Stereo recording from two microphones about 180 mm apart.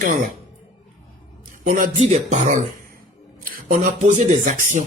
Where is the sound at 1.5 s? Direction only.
45° right (ahead or behind).